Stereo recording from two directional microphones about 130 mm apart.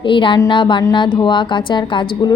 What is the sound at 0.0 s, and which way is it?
A woman's voice, 40° left (ahead or behind).